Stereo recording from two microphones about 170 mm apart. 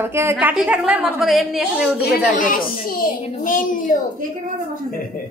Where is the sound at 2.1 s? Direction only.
55° left (ahead or behind).